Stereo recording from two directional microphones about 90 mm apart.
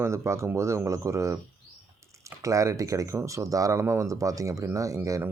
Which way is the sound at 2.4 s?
35° right (ahead or behind).